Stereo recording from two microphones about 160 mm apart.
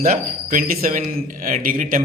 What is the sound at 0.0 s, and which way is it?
A man's voice, 55° right (ahead or behind).